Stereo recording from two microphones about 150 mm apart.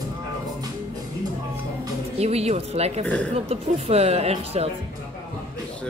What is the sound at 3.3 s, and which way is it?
Speech, 45° right (ahead or behind).